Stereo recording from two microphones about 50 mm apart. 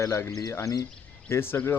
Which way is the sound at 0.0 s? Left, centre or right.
Left.